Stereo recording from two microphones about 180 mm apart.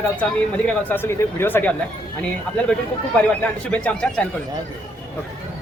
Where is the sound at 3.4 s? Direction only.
5° left (ahead or behind).